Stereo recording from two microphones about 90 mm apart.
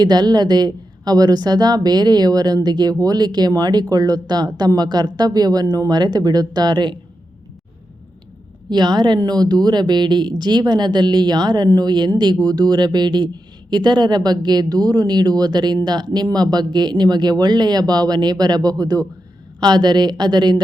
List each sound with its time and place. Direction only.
0.0 s speech: 50° right (ahead or behind)
8.7 s speech: 55° right (ahead or behind)